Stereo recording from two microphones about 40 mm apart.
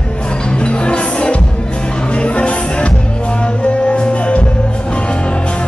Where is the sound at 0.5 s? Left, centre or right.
Left.